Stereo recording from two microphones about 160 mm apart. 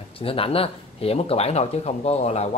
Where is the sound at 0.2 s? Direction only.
35° left (ahead or behind).